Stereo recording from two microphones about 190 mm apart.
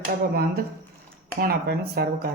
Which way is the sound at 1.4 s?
55° right (ahead or behind).